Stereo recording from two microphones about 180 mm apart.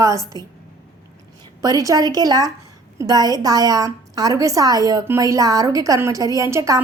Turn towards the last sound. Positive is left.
turn(degrees=-15)  # may be behind; listen again after turning